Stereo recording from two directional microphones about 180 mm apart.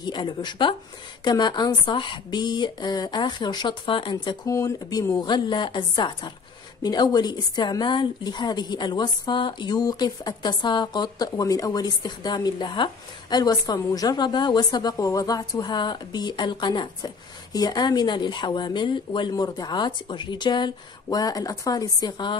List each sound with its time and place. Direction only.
0.0 s a woman's voice: 25° left (ahead or behind)